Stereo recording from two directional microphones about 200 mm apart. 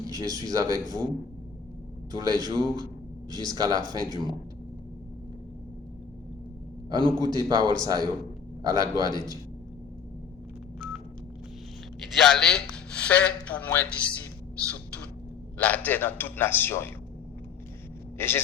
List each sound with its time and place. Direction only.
0.1 s a man's voice: 20° right (ahead or behind)
2.1 s a man's voice: 20° right (ahead or behind)
7.0 s a man's voice: 20° right (ahead or behind)
11.9 s speech: centre (ahead or behind)
15.5 s a man's voice: 10° left (ahead or behind)
18.2 s a man's voice: 10° left (ahead or behind)